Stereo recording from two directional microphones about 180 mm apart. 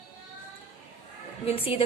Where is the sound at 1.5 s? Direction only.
30° left (ahead or behind).